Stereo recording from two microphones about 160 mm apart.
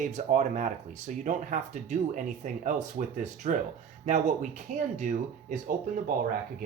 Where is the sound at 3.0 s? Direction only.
60° right (ahead or behind).